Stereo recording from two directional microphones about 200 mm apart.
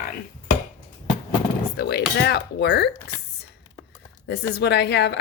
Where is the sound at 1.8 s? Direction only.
55° left (ahead or behind).